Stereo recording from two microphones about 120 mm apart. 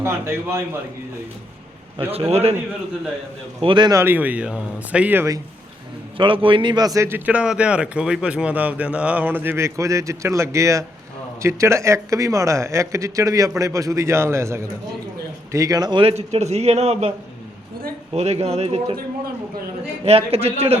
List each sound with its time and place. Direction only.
0.0 s speech: 20° right (ahead or behind)
2.1 s a man's voice: 55° right (ahead or behind)
3.6 s a man's voice: 45° right (ahead or behind)
3.9 s speech: 15° right (ahead or behind)
6.1 s a man's voice: 45° right (ahead or behind); by 7.2 s 25° right (ahead or behind)
7.3 s a man's voice: 10° right (ahead or behind); by 16.0 s 35° right (ahead or behind)
16.0 s a man's voice: 60° right (ahead or behind)
18.1 s a man's voice: 60° right (ahead or behind)
20.1 s a man's voice: 55° right (ahead or behind)